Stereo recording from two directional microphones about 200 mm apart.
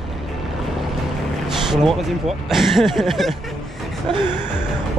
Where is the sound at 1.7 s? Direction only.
Centre (ahead or behind).